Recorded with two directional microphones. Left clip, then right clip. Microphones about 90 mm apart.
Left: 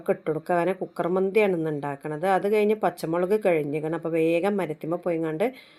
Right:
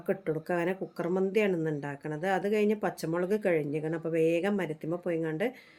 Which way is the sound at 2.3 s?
30° left (ahead or behind).